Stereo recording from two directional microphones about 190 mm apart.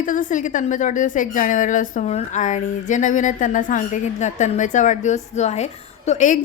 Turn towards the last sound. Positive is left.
turn(degrees=40)  # may be behind; listen again after turning